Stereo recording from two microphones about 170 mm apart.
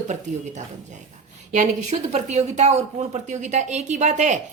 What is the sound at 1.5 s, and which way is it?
Speech, 40° right (ahead or behind).